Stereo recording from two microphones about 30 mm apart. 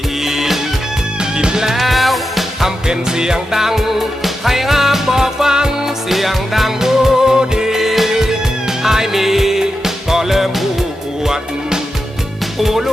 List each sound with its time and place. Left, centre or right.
0.2 s music: centre
1.2 s music: right
1.5 s music: centre
1.8 s music: centre
2.6 s music: centre
6.1 s music: centre
11.2 s music: centre
12.5 s music: centre